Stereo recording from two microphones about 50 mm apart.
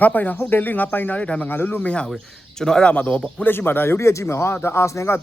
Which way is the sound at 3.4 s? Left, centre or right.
Left.